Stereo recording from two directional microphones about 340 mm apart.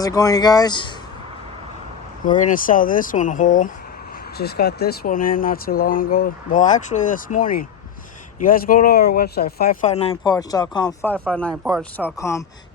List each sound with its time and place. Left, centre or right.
0.0 s speech: centre
2.2 s speech: left